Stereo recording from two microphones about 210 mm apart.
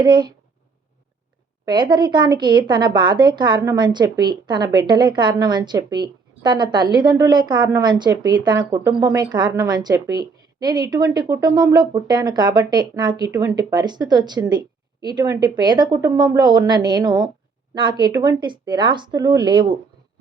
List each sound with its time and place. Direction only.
0.0 s a woman's voice: 20° right (ahead or behind)
1.6 s a woman's voice: 20° right (ahead or behind)